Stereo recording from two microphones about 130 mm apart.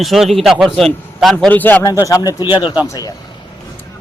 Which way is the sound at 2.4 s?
35° left (ahead or behind).